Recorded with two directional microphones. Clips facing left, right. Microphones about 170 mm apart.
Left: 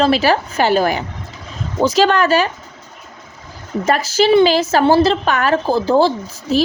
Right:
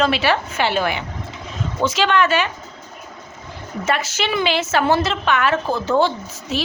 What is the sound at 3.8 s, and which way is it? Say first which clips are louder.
A woman's voice: left 7 dB; 35° left (ahead or behind).